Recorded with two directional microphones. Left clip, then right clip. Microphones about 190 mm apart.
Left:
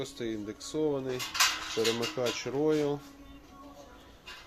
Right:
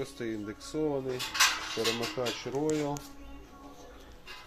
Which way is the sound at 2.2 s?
20° left (ahead or behind).